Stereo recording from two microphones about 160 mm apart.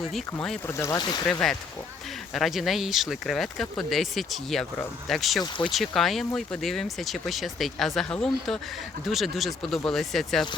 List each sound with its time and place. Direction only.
0.1 s speech: centre (ahead or behind)
0.7 s speech: 20° left (ahead or behind)
1.3 s speech: 5° left (ahead or behind)
5.4 s speech: 30° left (ahead or behind)
5.7 s speech: centre (ahead or behind)